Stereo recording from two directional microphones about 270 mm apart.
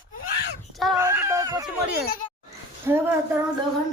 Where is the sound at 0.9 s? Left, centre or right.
Centre.